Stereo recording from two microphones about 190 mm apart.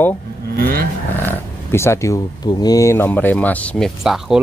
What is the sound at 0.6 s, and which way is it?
Vehicle, 50° right (ahead or behind).